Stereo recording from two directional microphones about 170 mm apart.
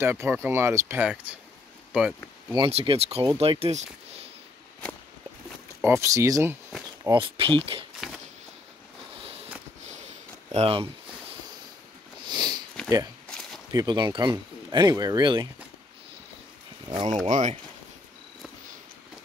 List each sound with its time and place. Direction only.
0.0 s speech: 15° right (ahead or behind)
2.5 s speech: 30° right (ahead or behind)
5.8 s speech: 15° right (ahead or behind)
7.1 s speech: 30° right (ahead or behind)
8.0 s a sound: centre (ahead or behind)
10.5 s a sound: 35° right (ahead or behind)
12.3 s sniff: 25° right (ahead or behind)
12.8 s a sound: 5° left (ahead or behind)
13.7 s speech: 25° right (ahead or behind)
16.8 s speech: 25° right (ahead or behind)
17.3 s speech: 45° right (ahead or behind)